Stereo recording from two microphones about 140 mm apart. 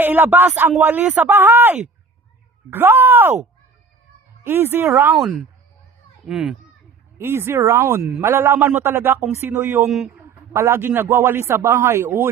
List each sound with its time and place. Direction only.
0.0 s a man's voice: 15° right (ahead or behind)
4.4 s a man's voice: 15° right (ahead or behind)
5.1 s a child's voice: 5° right (ahead or behind)
7.2 s a man's voice: 15° right (ahead or behind)